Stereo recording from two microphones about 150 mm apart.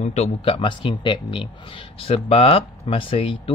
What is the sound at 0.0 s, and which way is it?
Speech, 45° left (ahead or behind).